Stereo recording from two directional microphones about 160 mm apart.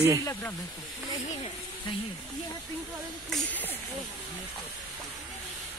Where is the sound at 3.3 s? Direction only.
10° left (ahead or behind).